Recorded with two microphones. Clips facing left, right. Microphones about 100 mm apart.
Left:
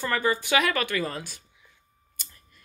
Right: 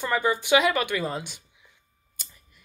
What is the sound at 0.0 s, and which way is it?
Speech, 15° right (ahead or behind).